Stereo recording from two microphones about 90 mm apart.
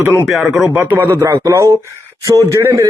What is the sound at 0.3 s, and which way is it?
Speech, centre (ahead or behind).